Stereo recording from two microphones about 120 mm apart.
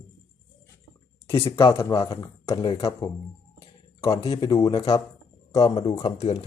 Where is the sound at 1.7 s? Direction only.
25° left (ahead or behind).